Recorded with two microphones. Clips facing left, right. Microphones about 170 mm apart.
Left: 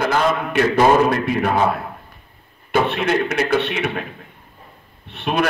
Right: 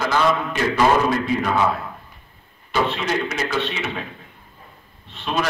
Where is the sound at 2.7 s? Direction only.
60° left (ahead or behind).